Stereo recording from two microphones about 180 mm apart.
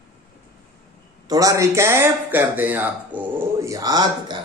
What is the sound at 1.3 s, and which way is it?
Speech, 20° right (ahead or behind).